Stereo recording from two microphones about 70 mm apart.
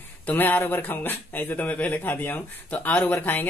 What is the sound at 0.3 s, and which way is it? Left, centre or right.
Speech, left.